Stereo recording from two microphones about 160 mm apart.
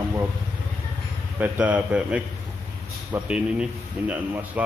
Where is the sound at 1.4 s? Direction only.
10° right (ahead or behind).